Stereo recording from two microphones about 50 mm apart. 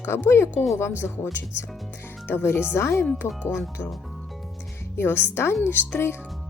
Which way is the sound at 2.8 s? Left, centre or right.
Left.